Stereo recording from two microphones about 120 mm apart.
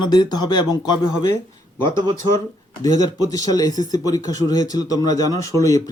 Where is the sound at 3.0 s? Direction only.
30° left (ahead or behind).